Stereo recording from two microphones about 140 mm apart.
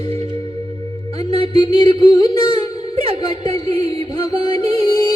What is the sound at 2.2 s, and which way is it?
Music, 30° left (ahead or behind).